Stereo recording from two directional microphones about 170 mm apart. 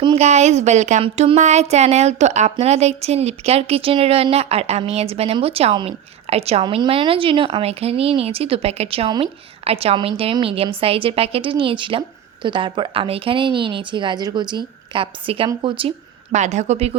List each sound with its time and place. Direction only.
0.0 s speech: 35° right (ahead or behind)
16.3 s speech: 40° right (ahead or behind)